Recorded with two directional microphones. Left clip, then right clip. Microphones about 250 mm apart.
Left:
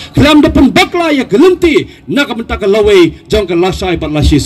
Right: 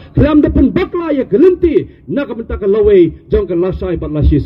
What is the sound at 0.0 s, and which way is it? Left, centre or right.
A man's voice, left.